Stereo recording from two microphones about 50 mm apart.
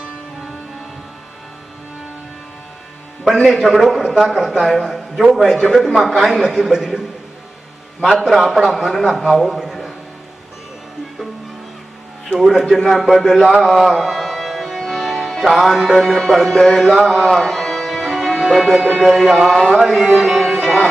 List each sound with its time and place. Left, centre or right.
3.2 s a man's voice: centre
8.3 s a man's voice: centre
9.4 s a sound: centre
12.4 s a man's voice: centre
13.5 s music: centre
16.1 s a man's voice: centre
16.6 s music: centre
16.9 s a man's voice: centre
17.3 s music: centre
19.0 s a man's voice: centre
20.1 s music: centre
20.7 s music: left